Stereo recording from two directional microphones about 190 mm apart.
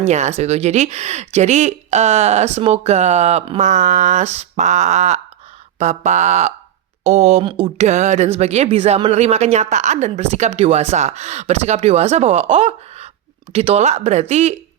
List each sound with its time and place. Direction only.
0.0 s speech: 35° right (ahead or behind)